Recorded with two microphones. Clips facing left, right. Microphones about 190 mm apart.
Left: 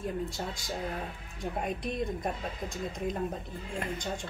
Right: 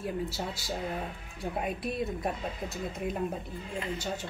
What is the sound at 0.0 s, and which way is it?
Speech, 5° right (ahead or behind).